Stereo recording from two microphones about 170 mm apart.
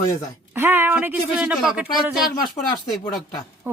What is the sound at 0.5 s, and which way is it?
Speech, 15° right (ahead or behind).